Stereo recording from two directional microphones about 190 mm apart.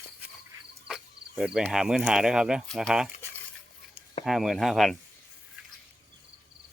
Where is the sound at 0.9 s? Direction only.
5° right (ahead or behind).